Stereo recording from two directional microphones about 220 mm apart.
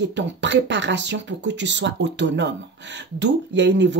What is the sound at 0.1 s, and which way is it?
Speech, 55° right (ahead or behind).